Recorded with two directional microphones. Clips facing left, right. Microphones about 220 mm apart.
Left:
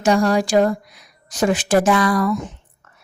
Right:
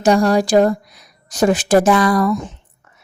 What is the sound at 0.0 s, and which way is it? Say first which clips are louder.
A woman's voice: right 3 dB; 35° right (ahead or behind).